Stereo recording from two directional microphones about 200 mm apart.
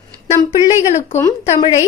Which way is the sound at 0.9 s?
35° left (ahead or behind).